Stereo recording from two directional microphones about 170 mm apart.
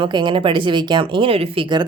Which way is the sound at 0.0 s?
25° right (ahead or behind).